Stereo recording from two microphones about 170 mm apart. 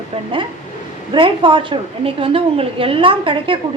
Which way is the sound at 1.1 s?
30° right (ahead or behind).